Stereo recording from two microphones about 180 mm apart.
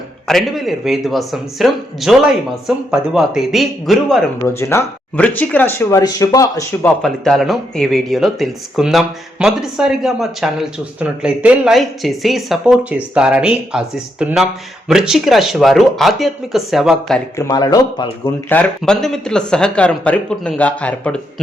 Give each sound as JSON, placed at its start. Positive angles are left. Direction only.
{"t": 0.3, "sound": "speech", "side_deg": 0}
{"t": 4.4, "sound": "speech", "side_deg": 15}
{"t": 7.0, "sound": "speech", "side_deg": 0}
{"t": 17.3, "sound": "speech", "side_deg": 20}
{"t": 18.4, "sound": "speech", "side_deg": 10}